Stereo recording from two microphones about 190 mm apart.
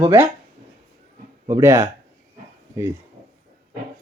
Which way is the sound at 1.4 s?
15° right (ahead or behind).